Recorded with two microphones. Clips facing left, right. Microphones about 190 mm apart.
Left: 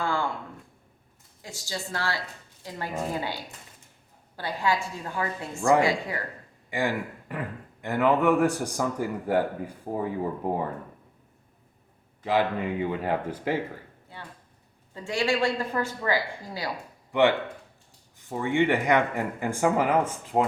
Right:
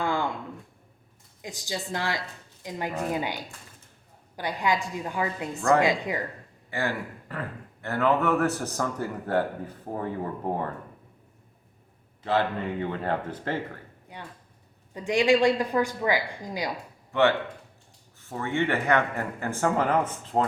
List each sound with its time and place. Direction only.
0.0 s a sound: 20° right (ahead or behind)
1.4 s speech: 15° right (ahead or behind)
6.7 s a man's voice: 15° left (ahead or behind)
12.2 s a man's voice: 10° left (ahead or behind)
14.1 s speech: 15° right (ahead or behind)
17.1 s a man's voice: 15° left (ahead or behind)